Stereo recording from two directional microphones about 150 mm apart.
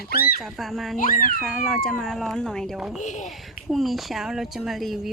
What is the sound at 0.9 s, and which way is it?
Speech, 60° left (ahead or behind).